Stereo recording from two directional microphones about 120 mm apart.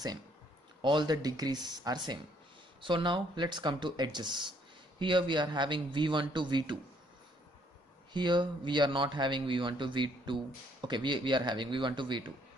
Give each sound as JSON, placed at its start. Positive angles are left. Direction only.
{"t": 0.8, "sound": "a man's voice", "side_deg": -40}
{"t": 8.1, "sound": "a man's voice", "side_deg": -40}